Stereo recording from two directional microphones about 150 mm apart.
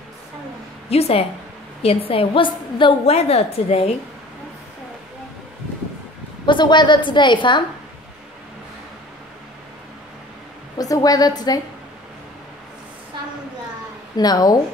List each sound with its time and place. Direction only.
0.8 s a woman's voice: 40° left (ahead or behind)
6.4 s a woman's voice: 30° left (ahead or behind)
10.8 s a woman's voice: 25° left (ahead or behind)
14.1 s a woman's voice: 25° left (ahead or behind)